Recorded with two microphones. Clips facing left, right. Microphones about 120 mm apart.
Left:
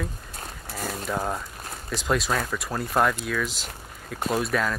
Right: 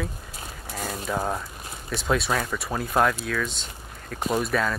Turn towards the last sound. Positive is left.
turn(degrees=0)  # may be behind; listen again after turning